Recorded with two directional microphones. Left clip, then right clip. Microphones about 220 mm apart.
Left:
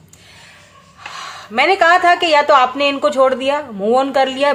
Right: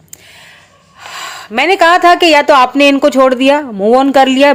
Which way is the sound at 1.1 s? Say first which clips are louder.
Right 5 dB; 40° right (ahead or behind).